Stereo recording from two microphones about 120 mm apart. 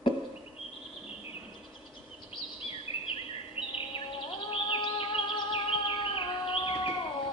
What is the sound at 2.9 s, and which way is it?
Bird vocalization, 50° left (ahead or behind).